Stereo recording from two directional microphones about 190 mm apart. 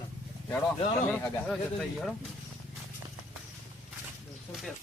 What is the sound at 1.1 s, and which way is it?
Speech, centre (ahead or behind).